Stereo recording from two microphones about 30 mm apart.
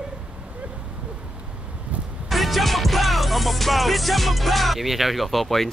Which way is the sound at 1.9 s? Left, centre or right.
Right.